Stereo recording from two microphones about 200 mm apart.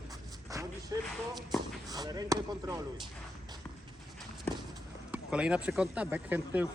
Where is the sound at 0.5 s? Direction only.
15° right (ahead or behind).